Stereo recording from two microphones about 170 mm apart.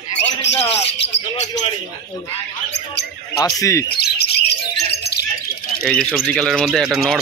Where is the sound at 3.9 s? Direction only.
70° left (ahead or behind).